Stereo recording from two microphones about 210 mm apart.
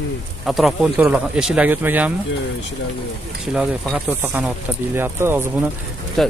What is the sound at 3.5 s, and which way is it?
A man's voice, 5° right (ahead or behind).